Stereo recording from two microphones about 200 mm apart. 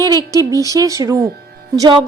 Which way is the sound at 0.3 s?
15° right (ahead or behind).